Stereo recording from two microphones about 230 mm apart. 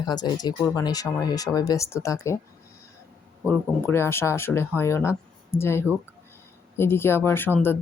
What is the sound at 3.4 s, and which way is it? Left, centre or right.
Speech, centre.